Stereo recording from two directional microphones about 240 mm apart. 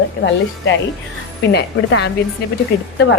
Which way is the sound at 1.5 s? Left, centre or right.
Left.